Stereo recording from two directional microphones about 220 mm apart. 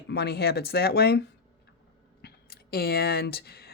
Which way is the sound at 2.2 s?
45° left (ahead or behind).